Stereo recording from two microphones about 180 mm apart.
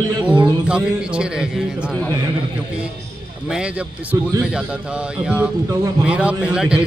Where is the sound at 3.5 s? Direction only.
5° right (ahead or behind).